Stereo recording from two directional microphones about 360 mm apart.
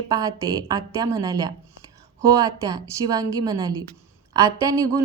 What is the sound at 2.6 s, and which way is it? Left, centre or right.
Speech, centre.